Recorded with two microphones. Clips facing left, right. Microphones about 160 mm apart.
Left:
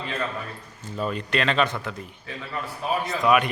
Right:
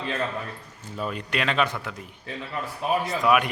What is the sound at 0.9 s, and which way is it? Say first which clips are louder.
A man's voice: left 3 dB; 5° right (ahead or behind).